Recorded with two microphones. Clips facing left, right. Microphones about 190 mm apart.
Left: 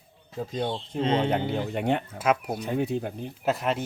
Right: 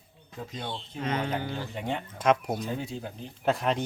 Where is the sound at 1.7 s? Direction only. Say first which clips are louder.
Left 7 dB; 65° left (ahead or behind).